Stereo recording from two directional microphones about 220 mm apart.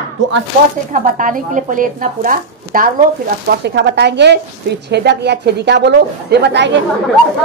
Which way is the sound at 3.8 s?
50° right (ahead or behind).